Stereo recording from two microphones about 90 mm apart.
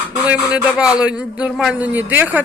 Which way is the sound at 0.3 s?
15° right (ahead or behind).